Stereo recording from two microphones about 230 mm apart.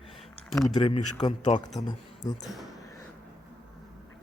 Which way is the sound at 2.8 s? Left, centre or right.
Centre.